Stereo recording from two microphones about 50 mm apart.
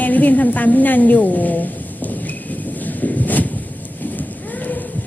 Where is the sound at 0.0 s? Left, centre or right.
Left.